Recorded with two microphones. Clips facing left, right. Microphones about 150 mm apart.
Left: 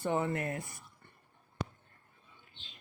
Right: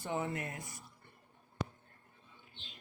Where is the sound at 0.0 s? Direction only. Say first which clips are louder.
Left 5 dB; 55° left (ahead or behind).